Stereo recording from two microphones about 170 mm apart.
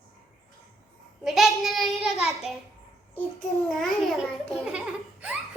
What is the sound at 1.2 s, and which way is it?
Child singing, centre (ahead or behind).